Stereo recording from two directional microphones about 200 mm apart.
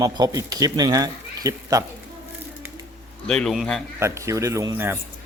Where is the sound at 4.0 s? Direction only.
15° right (ahead or behind).